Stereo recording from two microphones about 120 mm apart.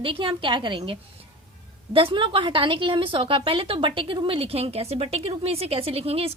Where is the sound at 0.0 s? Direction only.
45° right (ahead or behind).